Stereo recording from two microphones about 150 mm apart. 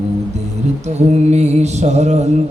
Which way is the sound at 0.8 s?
50° right (ahead or behind).